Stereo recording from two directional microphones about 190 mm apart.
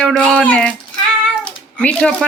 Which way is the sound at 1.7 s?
5° left (ahead or behind).